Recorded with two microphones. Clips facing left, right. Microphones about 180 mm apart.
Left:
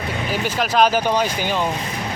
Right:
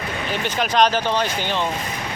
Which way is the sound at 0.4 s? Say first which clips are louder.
Left 1 dB; 5° left (ahead or behind).